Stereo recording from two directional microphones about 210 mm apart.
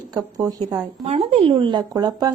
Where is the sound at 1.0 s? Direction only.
30° right (ahead or behind).